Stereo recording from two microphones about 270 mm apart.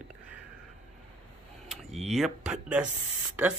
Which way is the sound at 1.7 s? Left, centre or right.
Centre.